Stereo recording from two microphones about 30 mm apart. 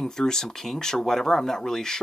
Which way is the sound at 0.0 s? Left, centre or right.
Centre.